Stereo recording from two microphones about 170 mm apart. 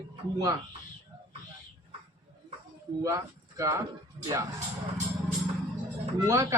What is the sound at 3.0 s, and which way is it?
Speech, 20° right (ahead or behind).